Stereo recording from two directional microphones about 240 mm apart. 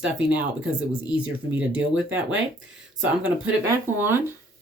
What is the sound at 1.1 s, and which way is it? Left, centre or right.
Speech, centre.